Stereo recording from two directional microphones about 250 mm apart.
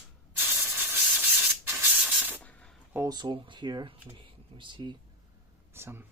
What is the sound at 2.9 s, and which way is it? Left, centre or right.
Speech, centre.